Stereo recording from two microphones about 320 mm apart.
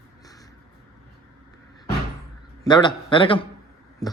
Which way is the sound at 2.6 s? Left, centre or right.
Centre.